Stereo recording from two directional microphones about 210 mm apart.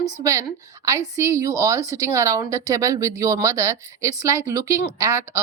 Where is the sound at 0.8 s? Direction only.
15° right (ahead or behind).